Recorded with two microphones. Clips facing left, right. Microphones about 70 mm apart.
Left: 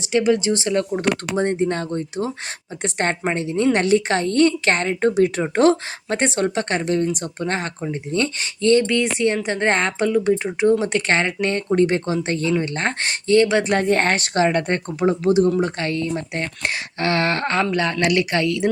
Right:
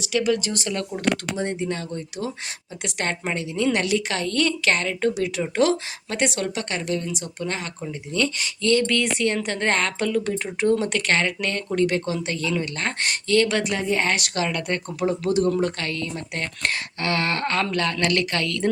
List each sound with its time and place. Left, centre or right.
0.0 s speech: left
1.4 s a woman's voice: left
13.7 s speech: left
14.2 s a woman's voice: left
17.6 s a woman's voice: centre